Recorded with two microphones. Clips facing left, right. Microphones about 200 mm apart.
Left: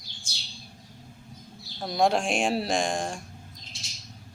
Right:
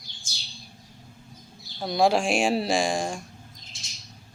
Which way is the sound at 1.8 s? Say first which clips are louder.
Right 2 dB; centre (ahead or behind).